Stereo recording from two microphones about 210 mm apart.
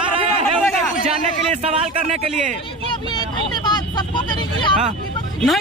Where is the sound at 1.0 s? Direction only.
30° right (ahead or behind).